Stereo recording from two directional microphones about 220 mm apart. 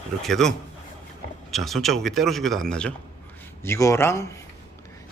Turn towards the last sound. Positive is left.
turn(degrees=10)  # may be behind; listen again after turning